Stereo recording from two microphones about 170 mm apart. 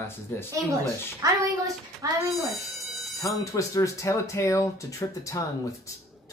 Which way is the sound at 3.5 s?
20° left (ahead or behind).